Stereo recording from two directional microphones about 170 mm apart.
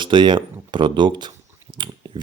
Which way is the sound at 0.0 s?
30° right (ahead or behind).